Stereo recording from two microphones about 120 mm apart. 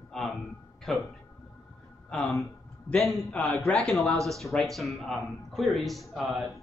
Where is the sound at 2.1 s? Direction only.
10° left (ahead or behind).